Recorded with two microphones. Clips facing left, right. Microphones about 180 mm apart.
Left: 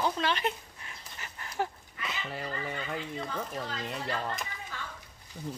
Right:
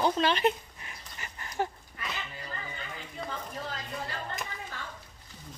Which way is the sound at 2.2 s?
75° left (ahead or behind).